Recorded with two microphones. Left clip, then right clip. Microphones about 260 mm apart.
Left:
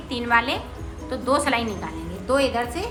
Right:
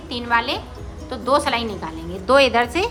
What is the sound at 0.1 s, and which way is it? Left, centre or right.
A woman's voice, centre.